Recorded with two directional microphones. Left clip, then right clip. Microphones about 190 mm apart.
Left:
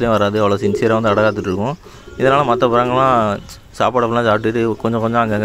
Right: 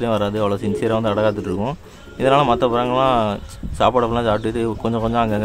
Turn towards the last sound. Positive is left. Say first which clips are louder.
# left 3 dB
turn(degrees=20)  # may be behind; listen again after turning